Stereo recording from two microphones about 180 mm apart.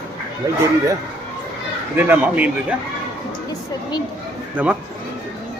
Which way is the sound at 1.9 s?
10° right (ahead or behind).